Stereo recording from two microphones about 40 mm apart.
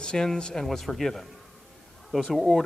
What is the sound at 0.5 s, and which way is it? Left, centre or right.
Speech, centre.